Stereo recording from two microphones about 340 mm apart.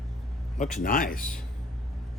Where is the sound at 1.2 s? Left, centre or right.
Centre.